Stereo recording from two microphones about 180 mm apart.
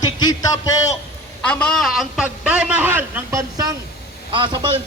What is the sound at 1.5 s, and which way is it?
A man's voice, 5° left (ahead or behind).